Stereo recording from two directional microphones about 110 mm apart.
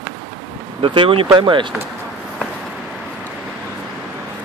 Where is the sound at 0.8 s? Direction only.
55° right (ahead or behind).